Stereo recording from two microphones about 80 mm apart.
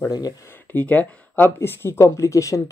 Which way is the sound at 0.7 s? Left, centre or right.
Centre.